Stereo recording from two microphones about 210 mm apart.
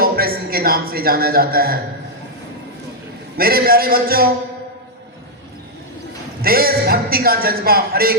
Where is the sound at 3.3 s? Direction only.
45° right (ahead or behind).